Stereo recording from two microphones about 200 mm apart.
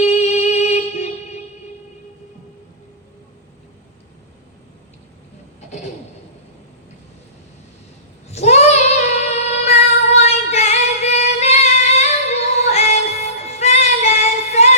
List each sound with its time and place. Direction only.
0.0 s music: 35° left (ahead or behind)
8.3 s child singing: 35° left (ahead or behind)
12.7 s music: 35° left (ahead or behind)